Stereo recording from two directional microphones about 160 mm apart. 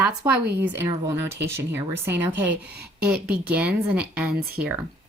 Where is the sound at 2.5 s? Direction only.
90° right.